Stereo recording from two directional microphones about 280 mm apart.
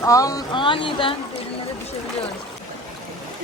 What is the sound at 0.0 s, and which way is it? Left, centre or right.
Speech, centre.